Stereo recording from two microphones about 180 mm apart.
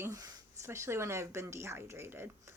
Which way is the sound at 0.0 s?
20° right (ahead or behind).